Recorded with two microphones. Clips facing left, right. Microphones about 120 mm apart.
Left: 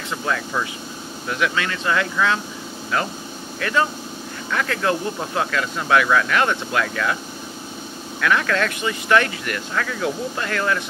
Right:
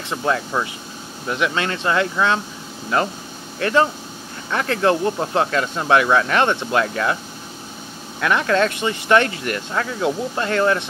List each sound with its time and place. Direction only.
0.1 s speech: 25° right (ahead or behind)
3.5 s speech: 30° right (ahead or behind)
8.2 s speech: 25° right (ahead or behind)